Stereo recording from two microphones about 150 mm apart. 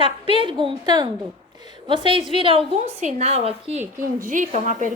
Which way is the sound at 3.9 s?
60° right (ahead or behind).